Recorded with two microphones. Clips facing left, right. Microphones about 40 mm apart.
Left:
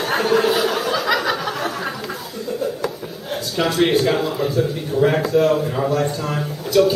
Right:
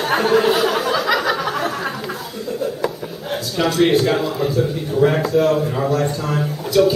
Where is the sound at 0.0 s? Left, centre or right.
Centre.